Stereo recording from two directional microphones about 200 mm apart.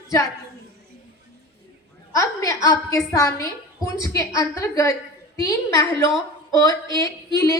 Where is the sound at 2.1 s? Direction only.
15° left (ahead or behind).